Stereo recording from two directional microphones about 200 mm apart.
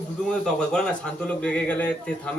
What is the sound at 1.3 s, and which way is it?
Speech, 5° left (ahead or behind).